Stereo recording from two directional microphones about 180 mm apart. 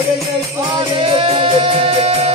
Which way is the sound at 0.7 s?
30° right (ahead or behind).